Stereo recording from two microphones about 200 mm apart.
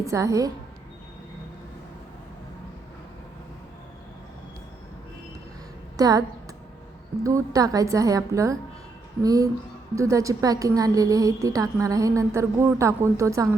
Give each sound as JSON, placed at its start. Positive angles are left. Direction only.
{"t": 0.0, "sound": "a woman's voice", "side_deg": -15}
{"t": 6.0, "sound": "a woman's voice", "side_deg": -20}
{"t": 7.3, "sound": "a woman's voice", "side_deg": -15}